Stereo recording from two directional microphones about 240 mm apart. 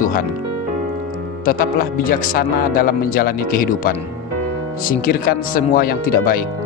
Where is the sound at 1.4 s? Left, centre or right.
Left.